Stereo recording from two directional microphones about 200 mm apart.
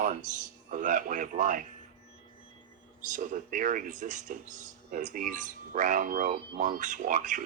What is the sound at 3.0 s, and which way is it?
Speech, 40° right (ahead or behind).